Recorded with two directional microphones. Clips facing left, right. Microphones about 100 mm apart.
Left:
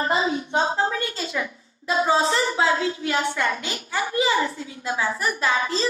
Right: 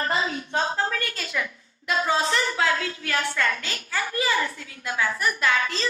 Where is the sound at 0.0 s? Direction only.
20° left (ahead or behind).